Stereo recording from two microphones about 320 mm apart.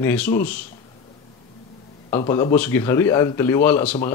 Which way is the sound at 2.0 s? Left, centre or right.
Centre.